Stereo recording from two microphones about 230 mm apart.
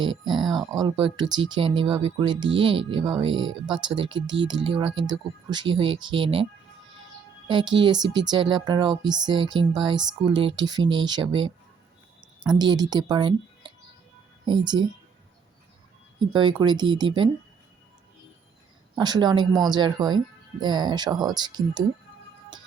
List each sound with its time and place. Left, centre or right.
0.0 s speech: centre
7.7 s speech: centre
12.5 s speech: centre
16.3 s speech: centre
18.9 s speech: centre